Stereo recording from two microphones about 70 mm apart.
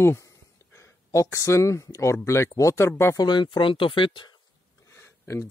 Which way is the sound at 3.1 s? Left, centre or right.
Left.